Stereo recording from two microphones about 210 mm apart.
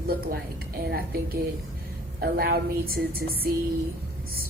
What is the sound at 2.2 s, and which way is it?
Speech, 45° right (ahead or behind).